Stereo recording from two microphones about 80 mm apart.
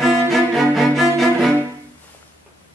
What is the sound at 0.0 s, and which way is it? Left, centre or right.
Cello, centre.